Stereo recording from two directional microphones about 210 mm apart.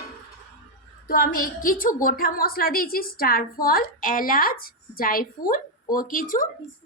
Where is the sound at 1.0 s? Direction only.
45° left (ahead or behind).